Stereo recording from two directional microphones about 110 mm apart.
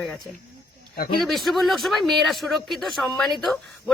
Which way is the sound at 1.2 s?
Centre (ahead or behind).